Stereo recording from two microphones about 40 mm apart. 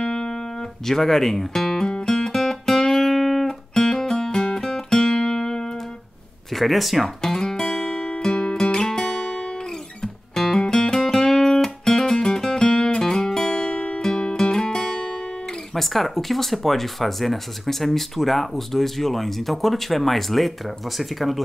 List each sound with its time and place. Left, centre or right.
0.0 s music: centre
6.5 s speech: centre
7.2 s music: centre
13.7 s music: left
14.0 s music: centre
15.7 s speech: centre